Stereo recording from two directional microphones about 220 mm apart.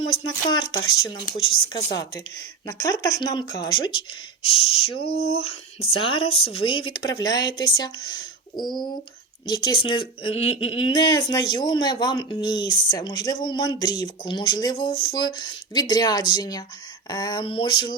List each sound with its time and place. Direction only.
0.4 s speech: 20° left (ahead or behind)
5.0 s a sound: 45° left (ahead or behind)
5.8 s speech: 25° left (ahead or behind)
6.7 s speech: 70° left (ahead or behind)
7.1 s speech: 15° left (ahead or behind)
14.8 s a sound: 45° left (ahead or behind)
15.1 s speech: 20° left (ahead or behind)